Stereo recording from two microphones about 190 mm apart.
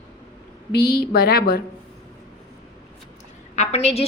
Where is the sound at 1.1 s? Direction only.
55° left (ahead or behind).